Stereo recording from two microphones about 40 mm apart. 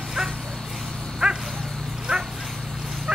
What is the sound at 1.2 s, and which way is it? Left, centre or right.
Dog, centre.